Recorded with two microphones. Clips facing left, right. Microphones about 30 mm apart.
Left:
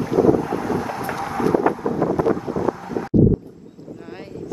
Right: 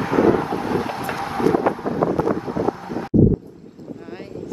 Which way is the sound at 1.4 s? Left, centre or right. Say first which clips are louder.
Even; right.